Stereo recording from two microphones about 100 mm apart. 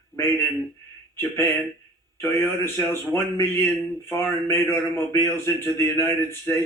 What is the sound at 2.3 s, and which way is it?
A man's voice, 20° left (ahead or behind).